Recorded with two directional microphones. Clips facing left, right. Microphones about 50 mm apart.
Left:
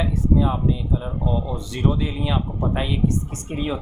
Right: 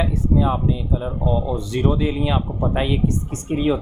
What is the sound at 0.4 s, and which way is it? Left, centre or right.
Speech, right.